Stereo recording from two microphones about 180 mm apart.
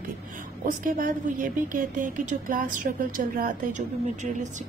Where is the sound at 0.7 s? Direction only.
50° right (ahead or behind).